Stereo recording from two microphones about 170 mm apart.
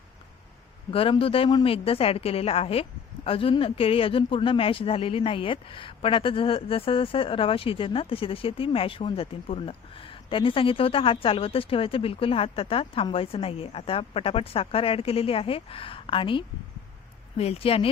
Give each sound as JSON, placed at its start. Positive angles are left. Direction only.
{"t": 0.9, "sound": "speech", "side_deg": 30}